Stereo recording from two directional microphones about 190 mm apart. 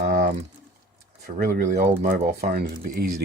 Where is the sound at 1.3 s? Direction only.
55° right (ahead or behind).